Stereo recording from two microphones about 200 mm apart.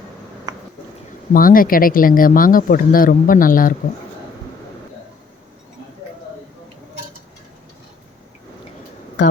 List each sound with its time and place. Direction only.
1.3 s speech: 45° left (ahead or behind)